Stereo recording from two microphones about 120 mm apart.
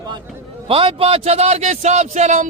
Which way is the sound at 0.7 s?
50° right (ahead or behind).